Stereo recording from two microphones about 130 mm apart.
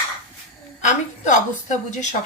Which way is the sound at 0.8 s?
70° left (ahead or behind).